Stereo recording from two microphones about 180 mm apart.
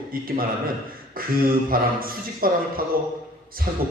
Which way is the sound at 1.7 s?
55° right (ahead or behind).